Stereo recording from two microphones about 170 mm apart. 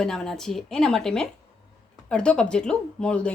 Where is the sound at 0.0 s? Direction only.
5° left (ahead or behind).